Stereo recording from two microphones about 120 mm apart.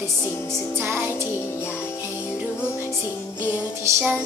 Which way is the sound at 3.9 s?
25° right (ahead or behind).